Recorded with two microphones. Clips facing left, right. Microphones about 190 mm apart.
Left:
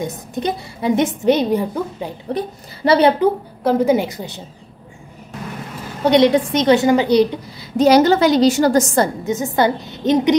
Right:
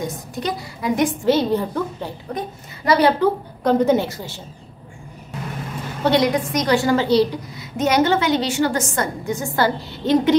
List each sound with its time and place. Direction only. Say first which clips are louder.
0.0 s a woman's voice: left 3 dB; 20° left (ahead or behind)
2.3 s a woman's voice: left 4 dB; 30° left (ahead or behind)
3.6 s a woman's voice: left 1 dB; 10° left (ahead or behind)
6.0 s a woman's voice: left 5 dB; 25° left (ahead or behind)
7.7 s a woman's voice: left 6 dB; 35° left (ahead or behind)
9.2 s a woman's voice: left 3 dB; 20° left (ahead or behind)